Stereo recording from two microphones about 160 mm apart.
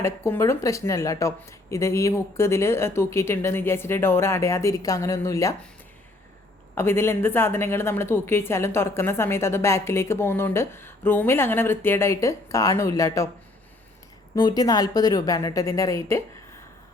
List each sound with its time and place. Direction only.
0.0 s a woman's voice: 15° left (ahead or behind)
6.7 s a woman's voice: 15° left (ahead or behind)
14.3 s speech: 25° left (ahead or behind)